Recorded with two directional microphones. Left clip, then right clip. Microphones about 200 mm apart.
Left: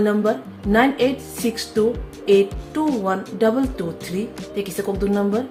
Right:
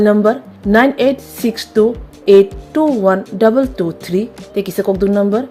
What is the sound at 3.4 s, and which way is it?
A woman's voice, 40° right (ahead or behind).